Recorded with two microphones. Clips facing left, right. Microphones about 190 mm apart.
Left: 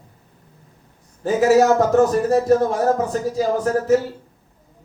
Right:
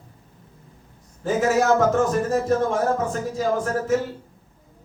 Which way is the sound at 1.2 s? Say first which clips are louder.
Left 5 dB; 35° left (ahead or behind).